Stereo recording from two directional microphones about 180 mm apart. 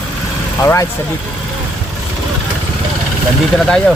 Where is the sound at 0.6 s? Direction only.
15° left (ahead or behind).